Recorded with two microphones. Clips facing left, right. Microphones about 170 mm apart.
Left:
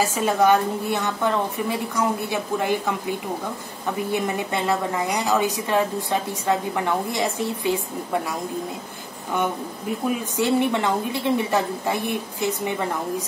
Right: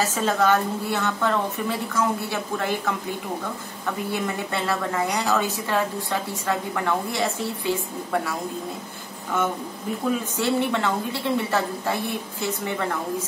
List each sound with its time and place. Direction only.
0.0 s a woman's voice: 10° left (ahead or behind)
3.8 s a woman's voice: 15° left (ahead or behind)
10.3 s a woman's voice: 15° left (ahead or behind)